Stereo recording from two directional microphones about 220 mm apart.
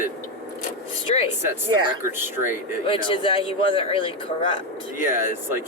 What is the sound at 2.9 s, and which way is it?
Speech, 25° left (ahead or behind).